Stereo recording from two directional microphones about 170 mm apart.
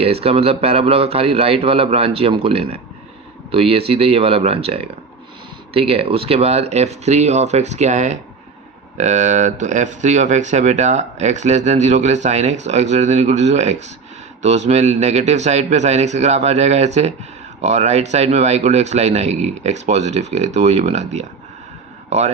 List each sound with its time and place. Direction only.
0.0 s a man's voice: 35° right (ahead or behind)